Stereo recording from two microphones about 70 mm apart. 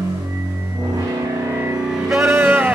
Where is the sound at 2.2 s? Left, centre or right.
Right.